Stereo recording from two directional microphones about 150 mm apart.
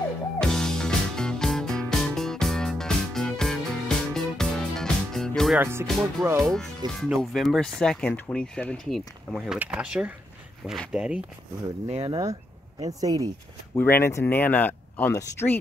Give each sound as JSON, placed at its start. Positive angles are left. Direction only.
{"t": 0.4, "sound": "music", "side_deg": 5}
{"t": 5.6, "sound": "speech", "side_deg": -15}
{"t": 5.9, "sound": "speech", "side_deg": 0}
{"t": 11.9, "sound": "speech", "side_deg": -40}
{"t": 12.8, "sound": "speech", "side_deg": -25}
{"t": 13.7, "sound": "speech", "side_deg": 15}